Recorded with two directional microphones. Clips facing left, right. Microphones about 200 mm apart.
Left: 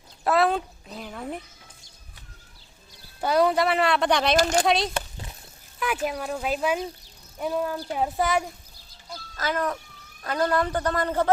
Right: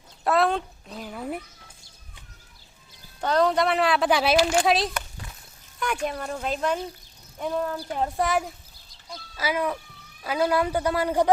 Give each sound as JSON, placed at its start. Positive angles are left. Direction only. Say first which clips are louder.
{"t": 0.3, "sound": "speech", "louder": "even", "side_deg": 0}
{"t": 3.2, "sound": "speech", "louder": "left 1 dB", "side_deg": 10}
{"t": 4.4, "sound": "speech", "louder": "right 1 dB", "side_deg": 40}
{"t": 4.6, "sound": "speech", "louder": "even", "side_deg": 0}
{"t": 4.9, "sound": "a sound", "louder": "left 3 dB", "side_deg": 25}
{"t": 5.8, "sound": "speech", "louder": "left 1 dB", "side_deg": 5}
{"t": 7.9, "sound": "a sound", "louder": "even", "side_deg": 5}
{"t": 9.3, "sound": "speech", "louder": "right 1 dB", "side_deg": -10}